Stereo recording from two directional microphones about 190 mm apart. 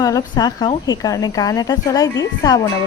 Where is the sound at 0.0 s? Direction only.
20° left (ahead or behind).